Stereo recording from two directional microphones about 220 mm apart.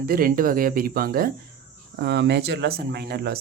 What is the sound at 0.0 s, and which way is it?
Speech, 40° right (ahead or behind).